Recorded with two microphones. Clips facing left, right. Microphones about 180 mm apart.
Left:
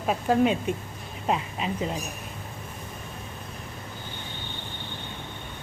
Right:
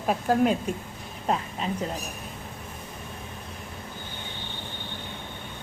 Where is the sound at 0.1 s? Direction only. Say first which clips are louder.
Even; centre (ahead or behind).